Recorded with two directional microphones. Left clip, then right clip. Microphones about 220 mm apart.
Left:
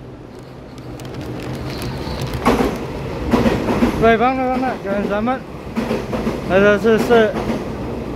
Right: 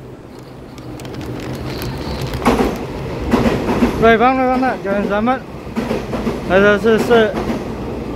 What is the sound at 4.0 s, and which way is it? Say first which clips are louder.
Speech: right 4 dB; 5° right (ahead or behind).